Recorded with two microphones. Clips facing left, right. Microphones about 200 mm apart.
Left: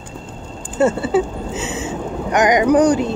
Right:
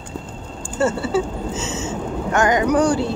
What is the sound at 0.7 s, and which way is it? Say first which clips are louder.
Speech: left 4 dB; 20° left (ahead or behind).